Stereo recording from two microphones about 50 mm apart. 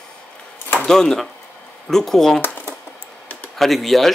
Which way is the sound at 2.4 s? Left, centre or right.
Left.